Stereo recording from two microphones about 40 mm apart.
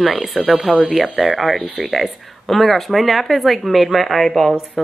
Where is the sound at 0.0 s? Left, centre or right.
Centre.